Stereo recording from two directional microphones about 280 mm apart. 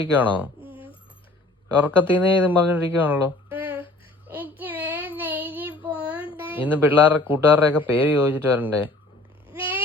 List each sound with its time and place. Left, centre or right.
0.2 s speech: centre
1.8 s speech: centre
4.3 s child singing: centre
6.4 s speech: centre
9.5 s a sound: centre